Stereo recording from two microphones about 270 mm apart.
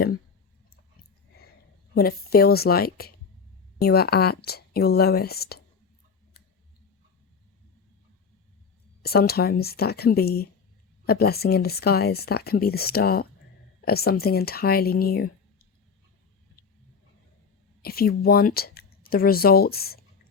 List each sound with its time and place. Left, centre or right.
2.0 s speech: left
9.0 s speech: left
17.8 s speech: left